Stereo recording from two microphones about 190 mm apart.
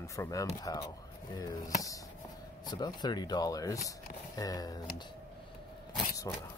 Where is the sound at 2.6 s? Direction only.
20° left (ahead or behind).